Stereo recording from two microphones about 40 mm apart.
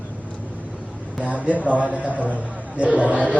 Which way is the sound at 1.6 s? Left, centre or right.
Right.